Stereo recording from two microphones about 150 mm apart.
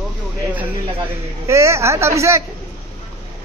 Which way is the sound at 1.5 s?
20° right (ahead or behind).